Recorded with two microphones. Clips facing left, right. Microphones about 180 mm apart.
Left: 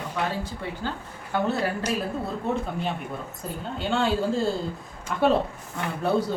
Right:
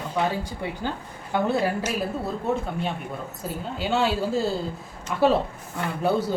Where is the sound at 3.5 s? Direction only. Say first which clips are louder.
Right 1 dB; 5° right (ahead or behind).